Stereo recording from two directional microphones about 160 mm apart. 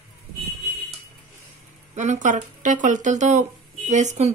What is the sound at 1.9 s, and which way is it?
Speech, 50° right (ahead or behind).